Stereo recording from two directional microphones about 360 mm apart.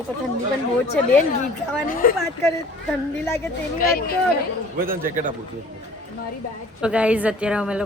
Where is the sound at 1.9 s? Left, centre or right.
Left.